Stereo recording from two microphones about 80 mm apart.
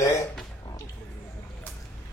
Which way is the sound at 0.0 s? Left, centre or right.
Left.